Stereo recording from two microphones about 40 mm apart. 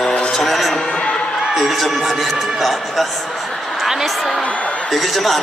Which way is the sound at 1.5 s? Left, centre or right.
Centre.